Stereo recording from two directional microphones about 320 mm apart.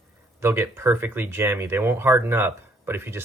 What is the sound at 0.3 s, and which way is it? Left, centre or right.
Speech, centre.